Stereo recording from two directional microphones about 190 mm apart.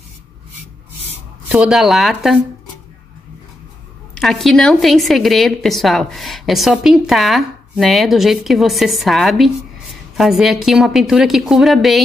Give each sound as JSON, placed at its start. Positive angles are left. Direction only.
{"t": 1.5, "sound": "a woman's voice", "side_deg": -5}
{"t": 4.1, "sound": "a woman's voice", "side_deg": 0}